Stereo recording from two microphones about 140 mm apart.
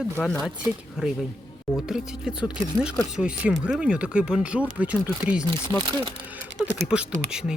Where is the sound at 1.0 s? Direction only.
5° right (ahead or behind).